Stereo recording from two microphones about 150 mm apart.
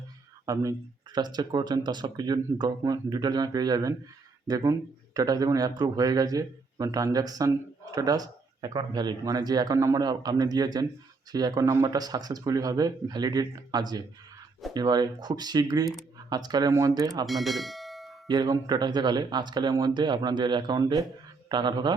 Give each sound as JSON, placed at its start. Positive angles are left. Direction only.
{"t": 0.4, "sound": "speech", "side_deg": -25}
{"t": 17.2, "sound": "speech", "side_deg": 0}
{"t": 18.3, "sound": "speech", "side_deg": -30}